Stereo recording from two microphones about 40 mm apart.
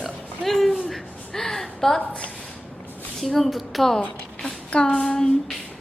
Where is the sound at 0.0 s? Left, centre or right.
Centre.